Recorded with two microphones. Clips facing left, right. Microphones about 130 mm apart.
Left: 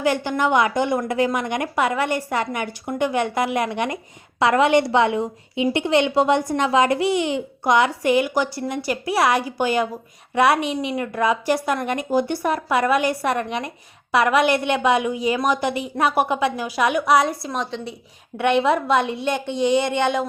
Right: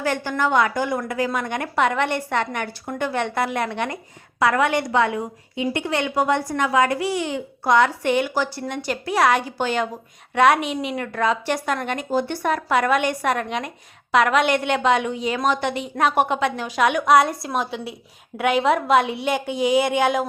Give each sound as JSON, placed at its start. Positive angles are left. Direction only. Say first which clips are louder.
{"t": 0.0, "sound": "a woman's voice", "louder": "left 2 dB", "side_deg": 15}